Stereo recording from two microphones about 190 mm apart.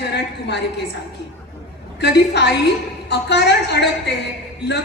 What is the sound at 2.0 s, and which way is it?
A woman's voice, 65° left (ahead or behind).